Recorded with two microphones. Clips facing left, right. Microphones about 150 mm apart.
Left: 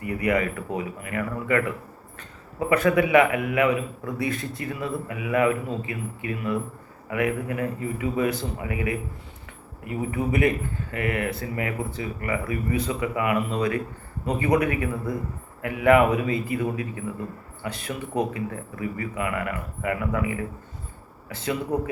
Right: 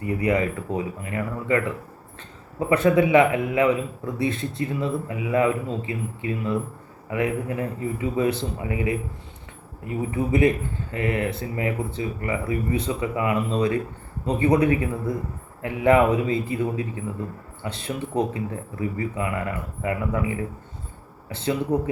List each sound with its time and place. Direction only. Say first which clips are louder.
0.0 s a man's voice: right 2 dB; 25° right (ahead or behind)
2.6 s a man's voice: right 2 dB; 25° right (ahead or behind)